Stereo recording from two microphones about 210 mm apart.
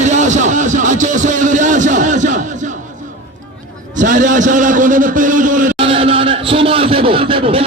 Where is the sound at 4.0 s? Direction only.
40° right (ahead or behind).